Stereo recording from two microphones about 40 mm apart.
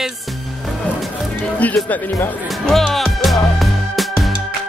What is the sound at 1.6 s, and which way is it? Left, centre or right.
Speech, left.